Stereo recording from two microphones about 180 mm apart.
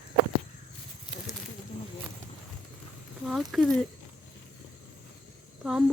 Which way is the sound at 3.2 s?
Centre (ahead or behind).